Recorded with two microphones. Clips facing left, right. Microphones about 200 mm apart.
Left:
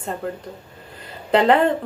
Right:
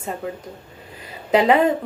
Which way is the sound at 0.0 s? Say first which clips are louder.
Left 1 dB; 5° right (ahead or behind).